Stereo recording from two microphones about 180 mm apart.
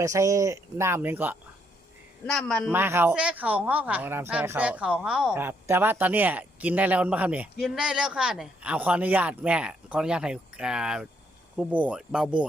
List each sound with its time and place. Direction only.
0.0 s speech: 20° right (ahead or behind)
2.2 s a man's voice: 5° left (ahead or behind)
2.7 s speech: 10° right (ahead or behind)